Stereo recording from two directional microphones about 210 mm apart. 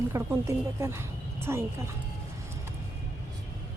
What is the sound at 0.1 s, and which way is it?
Speech, 15° right (ahead or behind).